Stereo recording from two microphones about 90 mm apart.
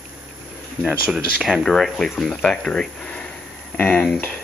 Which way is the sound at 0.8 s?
5° right (ahead or behind).